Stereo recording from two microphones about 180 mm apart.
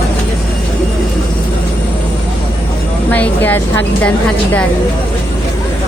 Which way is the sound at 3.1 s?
10° left (ahead or behind).